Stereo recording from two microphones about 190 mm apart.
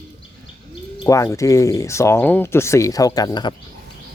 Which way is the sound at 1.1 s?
15° left (ahead or behind).